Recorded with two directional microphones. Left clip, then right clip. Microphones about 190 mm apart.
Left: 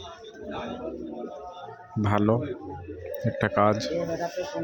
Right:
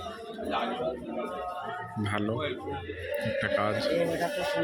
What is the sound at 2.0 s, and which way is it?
Speech, 35° left (ahead or behind).